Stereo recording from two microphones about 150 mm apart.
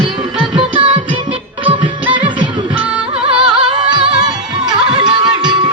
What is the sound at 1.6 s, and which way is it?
Music, 35° right (ahead or behind).